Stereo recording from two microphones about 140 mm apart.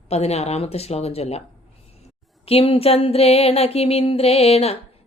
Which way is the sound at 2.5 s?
40° left (ahead or behind).